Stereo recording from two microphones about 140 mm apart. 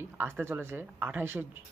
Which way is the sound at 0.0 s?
15° right (ahead or behind).